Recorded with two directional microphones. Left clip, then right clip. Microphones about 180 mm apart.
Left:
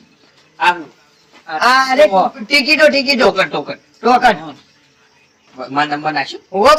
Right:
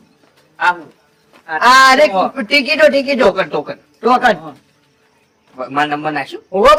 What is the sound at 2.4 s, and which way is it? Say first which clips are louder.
Speech: right 1 dB; 45° right (ahead or behind).